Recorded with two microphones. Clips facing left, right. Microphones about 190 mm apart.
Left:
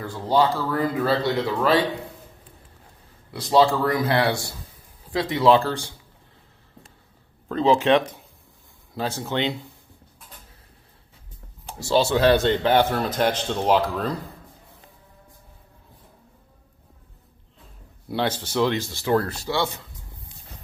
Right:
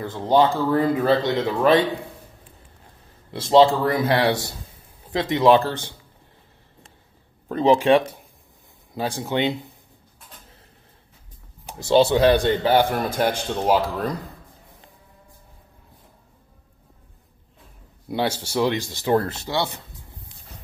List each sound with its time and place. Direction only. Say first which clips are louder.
0.0 s speech: right 3 dB; 20° right (ahead or behind)
3.3 s speech: right 3 dB; 25° right (ahead or behind)
7.4 s a man's voice: right 2 dB; 15° right (ahead or behind)
11.8 s a man's voice: right 3 dB; 20° right (ahead or behind)
18.1 s a man's voice: right 1 dB; 10° right (ahead or behind)